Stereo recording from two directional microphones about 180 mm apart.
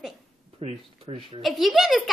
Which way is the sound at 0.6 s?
30° right (ahead or behind).